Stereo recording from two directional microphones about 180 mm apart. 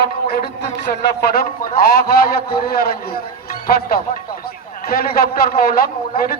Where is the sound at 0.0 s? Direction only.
55° left (ahead or behind).